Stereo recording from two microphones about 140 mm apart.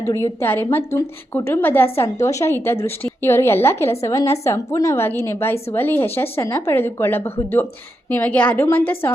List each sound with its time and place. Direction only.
0.0 s a woman's voice: 20° left (ahead or behind)